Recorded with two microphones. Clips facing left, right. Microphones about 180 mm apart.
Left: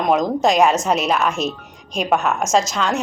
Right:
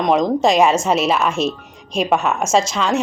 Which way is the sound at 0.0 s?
5° left (ahead or behind).